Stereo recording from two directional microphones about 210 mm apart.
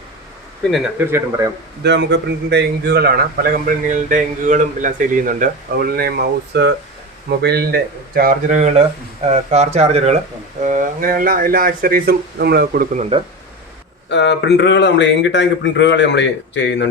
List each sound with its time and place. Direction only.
0.9 s speech: 10° right (ahead or behind)
1.8 s a man's voice: 55° right (ahead or behind)
14.1 s speech: 55° left (ahead or behind)